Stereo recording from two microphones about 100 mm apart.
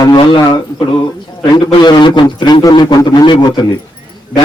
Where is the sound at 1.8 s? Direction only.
45° left (ahead or behind).